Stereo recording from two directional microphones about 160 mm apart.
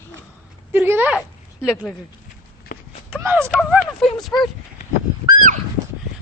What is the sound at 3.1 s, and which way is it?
Speech, 15° right (ahead or behind).